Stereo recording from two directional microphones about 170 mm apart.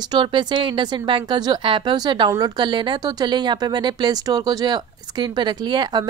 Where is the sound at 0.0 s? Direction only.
25° right (ahead or behind).